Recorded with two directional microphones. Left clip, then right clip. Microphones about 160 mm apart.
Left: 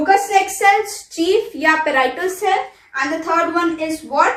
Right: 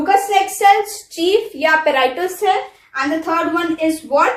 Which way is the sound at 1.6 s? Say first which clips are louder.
Right 2 dB; 25° right (ahead or behind).